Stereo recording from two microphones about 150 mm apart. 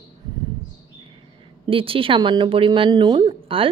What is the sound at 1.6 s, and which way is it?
Speech, 35° right (ahead or behind).